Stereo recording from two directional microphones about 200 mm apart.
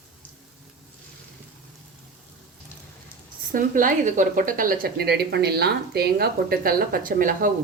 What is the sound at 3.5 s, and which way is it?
A woman's voice, 40° right (ahead or behind).